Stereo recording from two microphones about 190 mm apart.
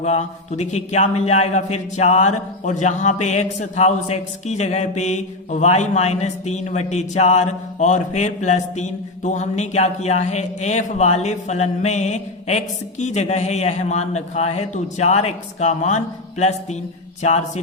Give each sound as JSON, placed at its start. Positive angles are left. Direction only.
{"t": 0.0, "sound": "a man's voice", "side_deg": 35}